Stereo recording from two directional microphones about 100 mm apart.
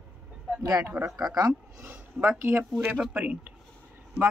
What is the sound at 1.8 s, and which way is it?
Speech, 25° right (ahead or behind).